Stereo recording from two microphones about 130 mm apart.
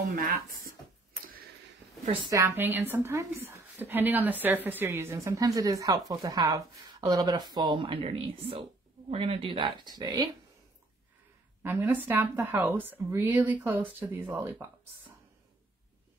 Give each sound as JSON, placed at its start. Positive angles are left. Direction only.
{"t": 0.1, "sound": "speech", "side_deg": -90}
{"t": 2.4, "sound": "a woman's voice", "side_deg": -15}
{"t": 11.6, "sound": "a woman's voice", "side_deg": -15}